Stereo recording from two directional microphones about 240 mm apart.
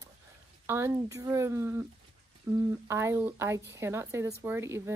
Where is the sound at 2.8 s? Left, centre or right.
Centre.